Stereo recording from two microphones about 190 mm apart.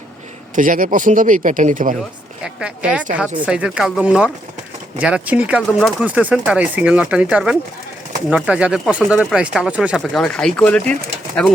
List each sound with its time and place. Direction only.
0.5 s a man's voice: 45° right (ahead or behind)
2.4 s speech: 5° right (ahead or behind)